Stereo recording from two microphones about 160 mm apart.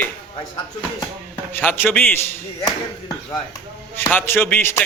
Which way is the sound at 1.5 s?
15° left (ahead or behind).